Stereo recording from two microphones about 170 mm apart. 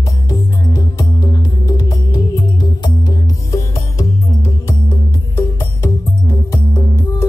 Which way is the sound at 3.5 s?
20° left (ahead or behind).